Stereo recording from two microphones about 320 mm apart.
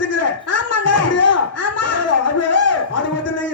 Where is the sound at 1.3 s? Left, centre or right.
Left.